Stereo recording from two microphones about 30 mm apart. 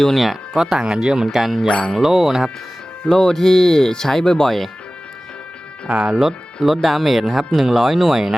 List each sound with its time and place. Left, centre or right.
0.2 s speech: centre
0.6 s speech: right
1.3 s music: centre
1.6 s a sound: left
2.0 s music: centre
3.1 s speech: centre
4.4 s speech: centre
5.9 s speech: right
6.7 s speech: centre